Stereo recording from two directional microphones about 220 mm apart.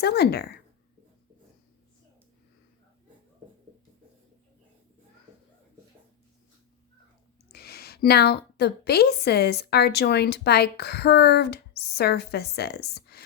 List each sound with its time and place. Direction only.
0.0 s a woman's voice: 45° left (ahead or behind)
7.5 s a woman's voice: 45° left (ahead or behind)